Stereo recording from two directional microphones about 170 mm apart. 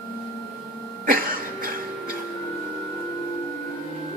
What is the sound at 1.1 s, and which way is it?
Cough, 55° right (ahead or behind).